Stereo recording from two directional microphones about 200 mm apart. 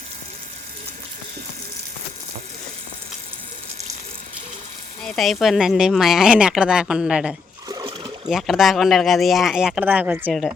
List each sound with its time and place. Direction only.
5.0 s speech: centre (ahead or behind)
7.7 s a sound: 20° right (ahead or behind)
8.3 s speech: centre (ahead or behind)